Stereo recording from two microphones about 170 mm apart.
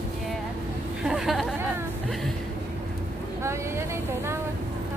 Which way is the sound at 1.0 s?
Centre (ahead or behind).